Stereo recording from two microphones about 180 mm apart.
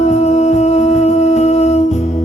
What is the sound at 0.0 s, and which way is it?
Music, 40° left (ahead or behind).